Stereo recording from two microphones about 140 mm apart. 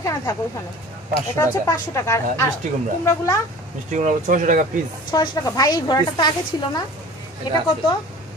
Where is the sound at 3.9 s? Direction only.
60° right (ahead or behind).